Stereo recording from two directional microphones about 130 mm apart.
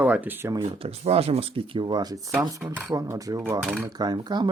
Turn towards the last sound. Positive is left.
turn(degrees=-35)  # may be behind; listen again after turning